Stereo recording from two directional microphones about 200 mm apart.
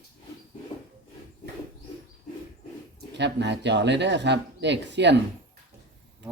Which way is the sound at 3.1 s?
60° right (ahead or behind).